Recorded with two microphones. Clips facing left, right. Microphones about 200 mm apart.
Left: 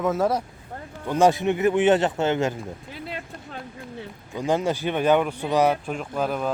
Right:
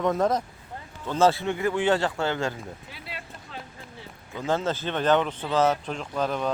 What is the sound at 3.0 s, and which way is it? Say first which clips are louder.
Music: left 5 dB; 50° left (ahead or behind).